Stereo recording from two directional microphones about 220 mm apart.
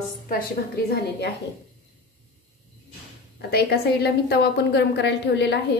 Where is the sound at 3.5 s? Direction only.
45° left (ahead or behind).